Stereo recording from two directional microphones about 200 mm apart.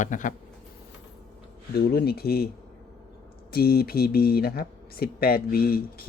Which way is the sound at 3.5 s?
50° left (ahead or behind).